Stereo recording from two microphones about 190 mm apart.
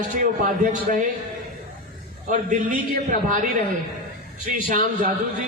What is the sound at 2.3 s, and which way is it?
A man's voice, 45° right (ahead or behind).